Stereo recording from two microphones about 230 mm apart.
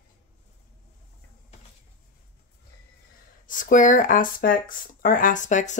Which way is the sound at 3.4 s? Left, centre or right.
Left.